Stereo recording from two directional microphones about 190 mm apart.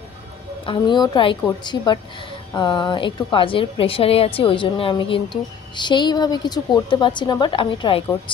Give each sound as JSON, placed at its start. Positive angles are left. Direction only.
{"t": 0.7, "sound": "a woman's voice", "side_deg": 25}